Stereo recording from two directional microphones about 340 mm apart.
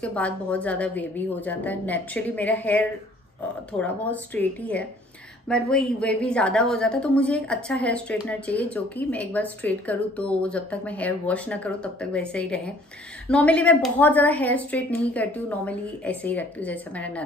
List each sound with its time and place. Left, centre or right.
0.0 s a woman's voice: centre